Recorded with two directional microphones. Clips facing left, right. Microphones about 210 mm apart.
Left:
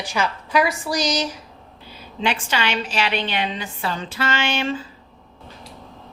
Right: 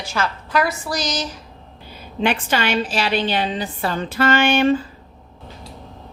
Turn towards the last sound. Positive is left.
turn(degrees=-55)  # may be behind; listen again after turning